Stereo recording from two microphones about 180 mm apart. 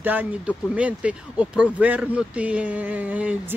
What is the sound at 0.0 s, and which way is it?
Speech, 10° right (ahead or behind).